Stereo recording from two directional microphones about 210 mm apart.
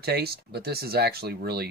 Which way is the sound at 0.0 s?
50° right (ahead or behind).